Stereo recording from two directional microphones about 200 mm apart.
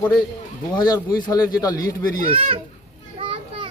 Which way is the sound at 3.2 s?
25° right (ahead or behind).